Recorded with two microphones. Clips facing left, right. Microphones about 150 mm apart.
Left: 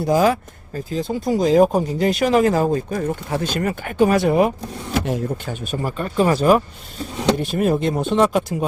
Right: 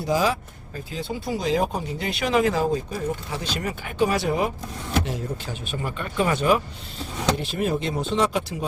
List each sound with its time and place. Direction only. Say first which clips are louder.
0.0 s speech: left 6 dB; 50° left (ahead or behind)
5.0 s speech: left 6 dB; 50° left (ahead or behind)
6.0 s speech: left 6 dB; 35° left (ahead or behind)
7.3 s speech: left 6 dB; 50° left (ahead or behind)